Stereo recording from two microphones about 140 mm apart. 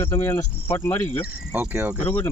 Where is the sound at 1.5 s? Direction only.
15° right (ahead or behind).